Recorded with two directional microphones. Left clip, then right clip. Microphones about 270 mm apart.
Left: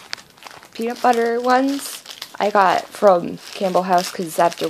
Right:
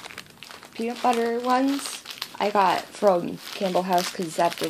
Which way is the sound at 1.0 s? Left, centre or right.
Left.